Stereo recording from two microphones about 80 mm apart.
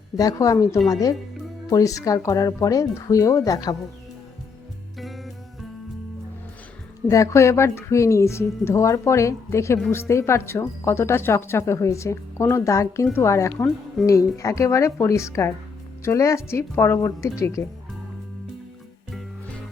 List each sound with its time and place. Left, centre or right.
0.2 s speech: left
4.9 s music: centre
7.1 s speech: left